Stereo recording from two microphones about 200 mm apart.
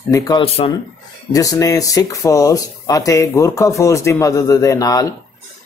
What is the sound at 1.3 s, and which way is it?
Speech, 15° left (ahead or behind).